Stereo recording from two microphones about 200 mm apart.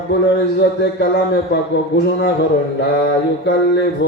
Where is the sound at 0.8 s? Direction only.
60° left (ahead or behind).